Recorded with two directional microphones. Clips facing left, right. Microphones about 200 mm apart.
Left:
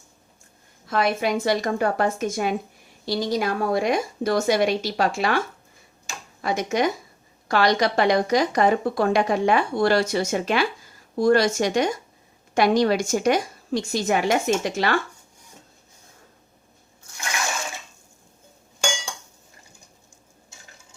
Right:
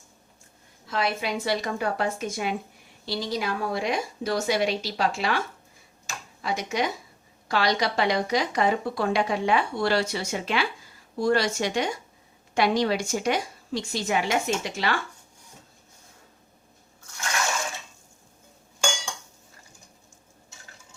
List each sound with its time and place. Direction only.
0.9 s speech: 50° left (ahead or behind)
6.4 s speech: 45° left (ahead or behind)